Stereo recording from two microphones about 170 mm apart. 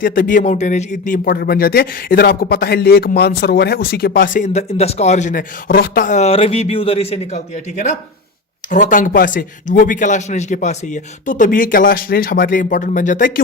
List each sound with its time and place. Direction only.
0.0 s speech: 55° left (ahead or behind)